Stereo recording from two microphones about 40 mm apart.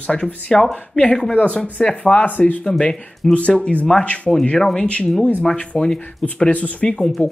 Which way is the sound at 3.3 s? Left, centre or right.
Left.